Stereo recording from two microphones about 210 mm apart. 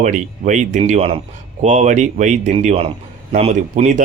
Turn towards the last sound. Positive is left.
turn(degrees=-35)  # may be behind; listen again after turning